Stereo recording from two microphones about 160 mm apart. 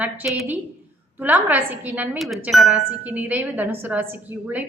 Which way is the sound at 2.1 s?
Centre (ahead or behind).